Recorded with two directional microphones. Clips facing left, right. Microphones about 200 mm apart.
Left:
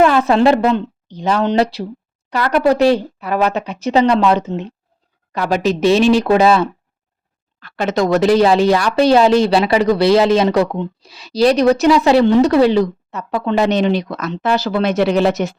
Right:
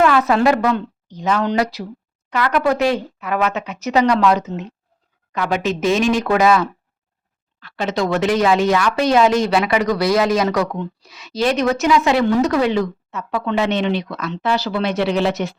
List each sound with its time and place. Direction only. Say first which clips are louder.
0.0 s a woman's voice: left 3 dB; 30° left (ahead or behind)
7.6 s speech: left 4 dB; 50° left (ahead or behind)